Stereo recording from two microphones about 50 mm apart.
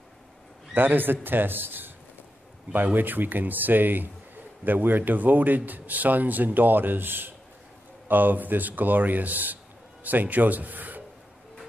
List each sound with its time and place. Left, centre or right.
0.7 s a man's voice: right